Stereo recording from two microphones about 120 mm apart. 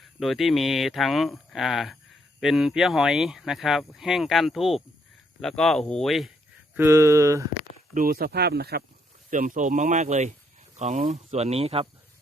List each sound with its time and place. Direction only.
0.0 s speech: centre (ahead or behind)
6.7 s speech: 20° right (ahead or behind)
9.3 s speech: 90° right; by 11.9 s 55° right (ahead or behind)